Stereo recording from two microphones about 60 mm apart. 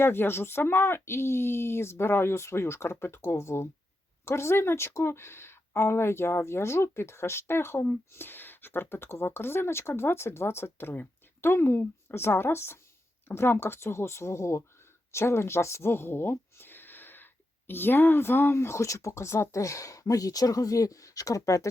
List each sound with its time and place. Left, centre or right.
0.0 s speech: left